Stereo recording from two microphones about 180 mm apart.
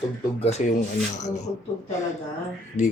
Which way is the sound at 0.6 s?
45° left (ahead or behind).